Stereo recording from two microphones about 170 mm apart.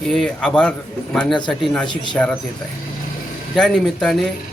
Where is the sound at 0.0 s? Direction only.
Centre (ahead or behind).